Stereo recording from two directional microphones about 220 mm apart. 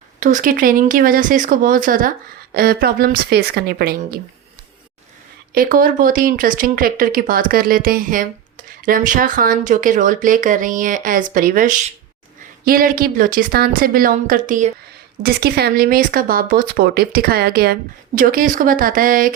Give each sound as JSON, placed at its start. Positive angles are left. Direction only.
{"t": 0.2, "sound": "speech", "side_deg": -35}
{"t": 5.5, "sound": "speech", "side_deg": -40}